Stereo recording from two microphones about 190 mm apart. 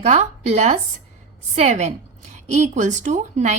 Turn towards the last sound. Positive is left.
turn(degrees=-40)  # may be behind; listen again after turning